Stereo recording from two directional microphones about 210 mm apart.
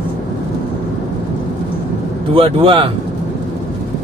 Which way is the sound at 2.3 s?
25° right (ahead or behind).